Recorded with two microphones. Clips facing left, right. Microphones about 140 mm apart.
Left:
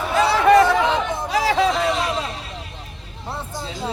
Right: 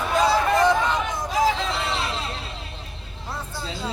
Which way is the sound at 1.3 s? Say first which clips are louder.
Left 3 dB; 75° left (ahead or behind).